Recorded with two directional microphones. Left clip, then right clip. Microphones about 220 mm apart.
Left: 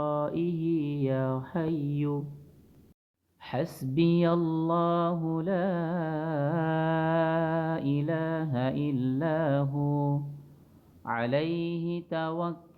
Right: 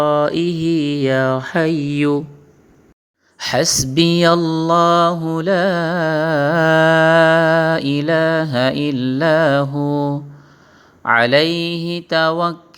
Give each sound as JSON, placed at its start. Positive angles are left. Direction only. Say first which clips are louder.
{"t": 0.0, "sound": "mantra", "louder": "right 14 dB", "side_deg": -25}
{"t": 3.3, "sound": "mantra", "louder": "right 17 dB", "side_deg": -25}